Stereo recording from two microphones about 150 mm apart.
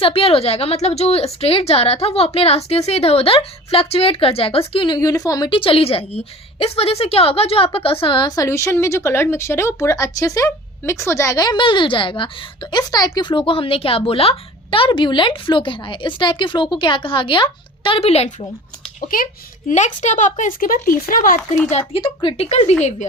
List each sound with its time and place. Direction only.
0.0 s a woman's voice: 40° left (ahead or behind)
4.9 s speech: 25° left (ahead or behind)
8.4 s speech: 20° left (ahead or behind); by 18.4 s 45° left (ahead or behind)
19.0 s speech: 70° left (ahead or behind)
21.7 s speech: 40° left (ahead or behind)
22.4 s a woman's voice: 50° left (ahead or behind)